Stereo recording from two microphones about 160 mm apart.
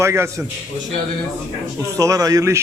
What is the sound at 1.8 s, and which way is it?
Speech, 20° right (ahead or behind).